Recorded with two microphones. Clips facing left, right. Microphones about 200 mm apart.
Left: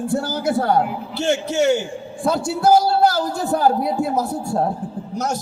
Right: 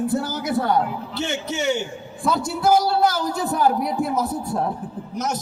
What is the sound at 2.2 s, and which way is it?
A man's voice, 25° left (ahead or behind).